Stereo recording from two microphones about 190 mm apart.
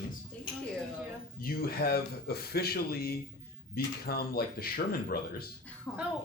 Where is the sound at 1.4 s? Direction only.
55° left (ahead or behind).